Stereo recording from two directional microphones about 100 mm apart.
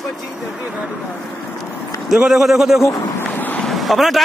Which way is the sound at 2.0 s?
5° right (ahead or behind).